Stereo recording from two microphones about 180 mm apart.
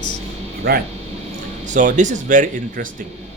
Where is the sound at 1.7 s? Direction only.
45° right (ahead or behind).